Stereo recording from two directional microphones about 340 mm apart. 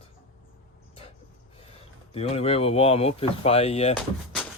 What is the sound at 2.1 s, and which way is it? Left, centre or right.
Speech, centre.